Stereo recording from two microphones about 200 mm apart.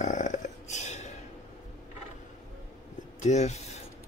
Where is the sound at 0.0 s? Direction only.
40° left (ahead or behind).